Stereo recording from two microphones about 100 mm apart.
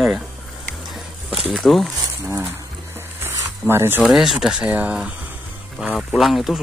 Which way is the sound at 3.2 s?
25° right (ahead or behind).